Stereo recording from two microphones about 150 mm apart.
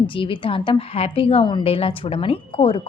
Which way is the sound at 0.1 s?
35° left (ahead or behind).